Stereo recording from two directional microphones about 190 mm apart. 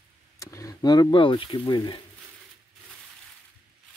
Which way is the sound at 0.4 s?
15° left (ahead or behind).